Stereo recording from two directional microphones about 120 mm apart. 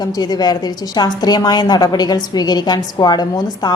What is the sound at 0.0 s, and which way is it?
A woman's voice, 35° left (ahead or behind).